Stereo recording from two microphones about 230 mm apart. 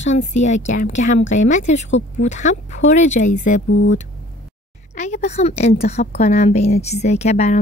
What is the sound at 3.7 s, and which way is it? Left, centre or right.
Speech, left.